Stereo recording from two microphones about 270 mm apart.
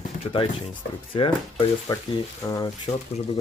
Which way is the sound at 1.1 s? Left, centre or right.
Centre.